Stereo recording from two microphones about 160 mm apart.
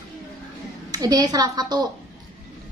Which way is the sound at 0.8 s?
25° right (ahead or behind).